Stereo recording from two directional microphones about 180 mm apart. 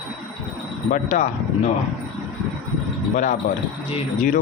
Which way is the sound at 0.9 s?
40° left (ahead or behind).